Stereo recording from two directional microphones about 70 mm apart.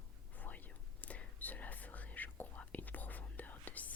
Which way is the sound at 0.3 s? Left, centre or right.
Left.